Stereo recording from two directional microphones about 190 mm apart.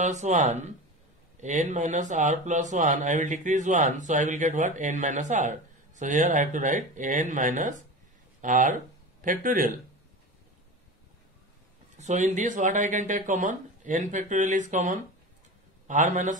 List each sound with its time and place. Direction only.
0.0 s speech: 40° right (ahead or behind)
12.0 s speech: 40° right (ahead or behind)